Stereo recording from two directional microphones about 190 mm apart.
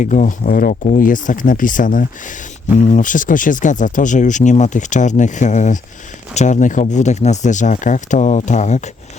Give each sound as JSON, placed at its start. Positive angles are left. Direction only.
{"t": 0.0, "sound": "speech", "side_deg": 40}